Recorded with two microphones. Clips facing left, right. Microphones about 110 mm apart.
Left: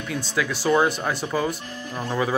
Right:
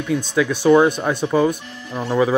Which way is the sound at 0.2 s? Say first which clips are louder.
Right 7 dB; 15° right (ahead or behind).